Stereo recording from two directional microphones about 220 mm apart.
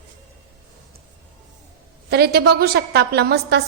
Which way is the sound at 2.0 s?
45° right (ahead or behind).